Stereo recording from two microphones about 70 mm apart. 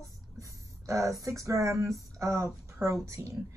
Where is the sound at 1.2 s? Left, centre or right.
Right.